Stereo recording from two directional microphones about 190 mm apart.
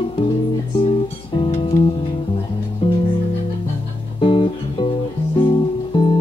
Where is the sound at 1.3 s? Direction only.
25° left (ahead or behind).